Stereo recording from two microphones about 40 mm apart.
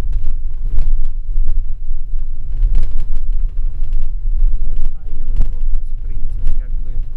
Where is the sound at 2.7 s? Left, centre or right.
Centre.